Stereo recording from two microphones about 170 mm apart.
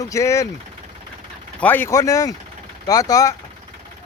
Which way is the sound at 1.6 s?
10° left (ahead or behind).